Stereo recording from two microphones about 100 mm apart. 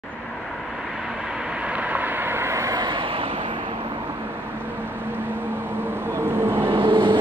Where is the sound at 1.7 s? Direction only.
15° right (ahead or behind).